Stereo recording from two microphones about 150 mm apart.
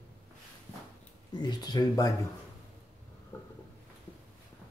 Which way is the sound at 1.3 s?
30° left (ahead or behind).